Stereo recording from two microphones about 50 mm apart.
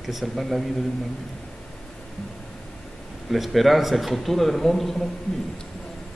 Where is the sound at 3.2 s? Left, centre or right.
Centre.